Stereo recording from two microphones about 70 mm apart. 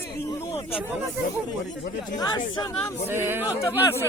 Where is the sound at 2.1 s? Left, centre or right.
Left.